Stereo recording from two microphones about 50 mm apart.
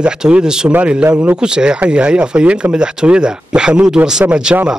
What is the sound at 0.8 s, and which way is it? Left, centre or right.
Speech, right.